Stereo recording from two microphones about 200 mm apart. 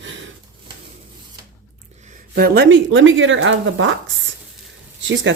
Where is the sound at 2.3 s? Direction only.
50° right (ahead or behind); by 3.9 s 70° right (ahead or behind).